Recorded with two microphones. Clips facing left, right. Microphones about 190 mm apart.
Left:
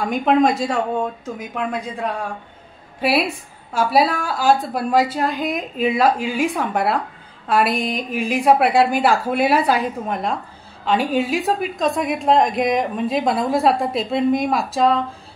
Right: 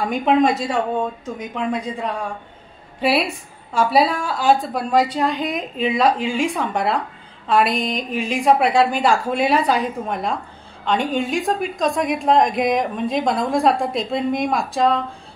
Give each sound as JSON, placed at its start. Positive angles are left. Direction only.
{"t": 0.1, "sound": "a woman's voice", "side_deg": 0}
{"t": 3.7, "sound": "a woman's voice", "side_deg": 0}